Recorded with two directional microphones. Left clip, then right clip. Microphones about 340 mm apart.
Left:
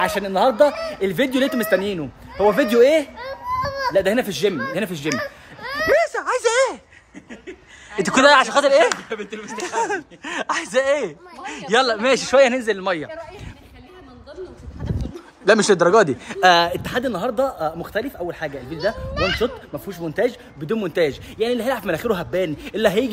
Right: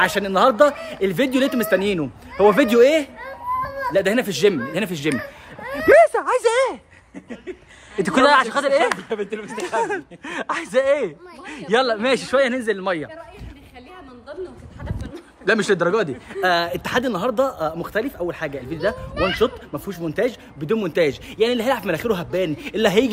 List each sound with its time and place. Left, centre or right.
0.0 s speech: centre
3.2 s children playing: centre
3.9 s speech: centre
5.6 s a sound: centre
5.9 s a sound: centre
8.0 s speech: centre
8.8 s speech: centre
9.8 s speech: centre
15.0 s speech: centre
16.8 s speech: centre